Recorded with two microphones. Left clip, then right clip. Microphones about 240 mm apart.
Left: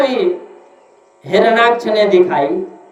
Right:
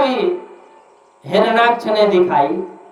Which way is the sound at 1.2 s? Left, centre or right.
Centre.